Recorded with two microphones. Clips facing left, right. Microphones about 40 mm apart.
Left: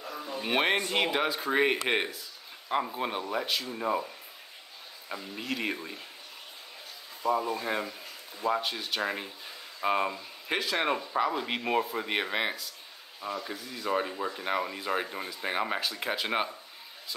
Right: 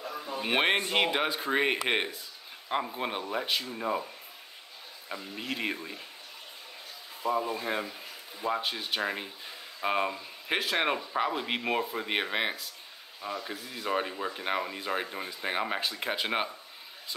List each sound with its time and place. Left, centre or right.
0.2 s speech: centre
5.4 s speech: centre
7.2 s speech: centre
9.0 s speech: centre
10.6 s speech: centre
13.5 s speech: centre
14.6 s speech: centre